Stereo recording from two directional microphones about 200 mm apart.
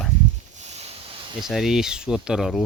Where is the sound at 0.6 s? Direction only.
35° right (ahead or behind).